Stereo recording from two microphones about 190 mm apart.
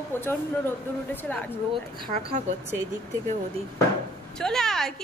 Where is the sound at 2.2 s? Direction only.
35° right (ahead or behind).